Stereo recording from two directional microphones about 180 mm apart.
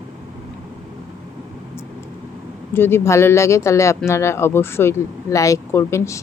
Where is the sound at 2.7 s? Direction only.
15° left (ahead or behind).